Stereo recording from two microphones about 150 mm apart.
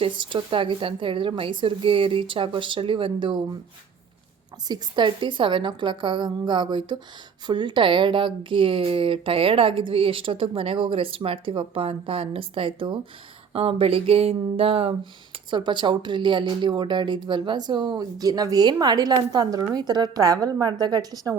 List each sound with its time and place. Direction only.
0.0 s speech: 35° right (ahead or behind)
4.7 s speech: 30° right (ahead or behind)